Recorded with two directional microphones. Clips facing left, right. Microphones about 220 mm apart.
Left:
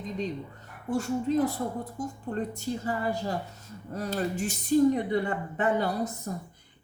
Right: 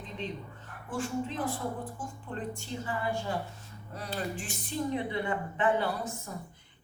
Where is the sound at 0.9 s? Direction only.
40° left (ahead or behind).